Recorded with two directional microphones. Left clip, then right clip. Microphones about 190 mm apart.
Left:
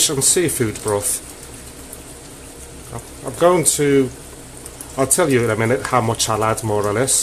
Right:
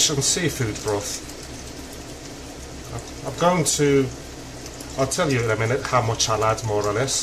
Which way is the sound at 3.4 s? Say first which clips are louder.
Left 5 dB; 40° left (ahead or behind).